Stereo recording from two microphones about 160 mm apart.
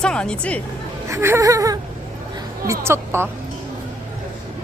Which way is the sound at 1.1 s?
15° right (ahead or behind).